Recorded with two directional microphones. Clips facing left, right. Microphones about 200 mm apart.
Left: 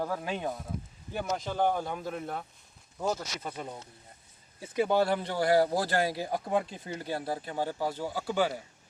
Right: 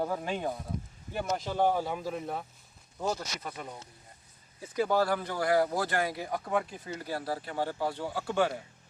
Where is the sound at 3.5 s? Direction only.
10° left (ahead or behind).